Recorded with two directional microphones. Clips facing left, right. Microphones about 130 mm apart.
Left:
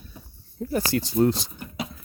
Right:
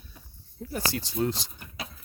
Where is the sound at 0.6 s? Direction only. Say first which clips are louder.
Left 8 dB; 70° left (ahead or behind).